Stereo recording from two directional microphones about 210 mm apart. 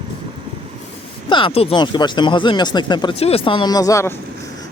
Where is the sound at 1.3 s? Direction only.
25° left (ahead or behind).